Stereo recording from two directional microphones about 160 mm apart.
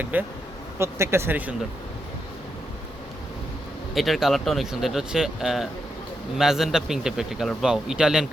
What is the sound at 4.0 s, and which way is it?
A man's voice, centre (ahead or behind).